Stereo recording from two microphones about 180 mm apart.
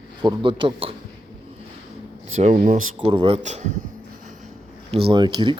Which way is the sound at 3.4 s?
40° right (ahead or behind).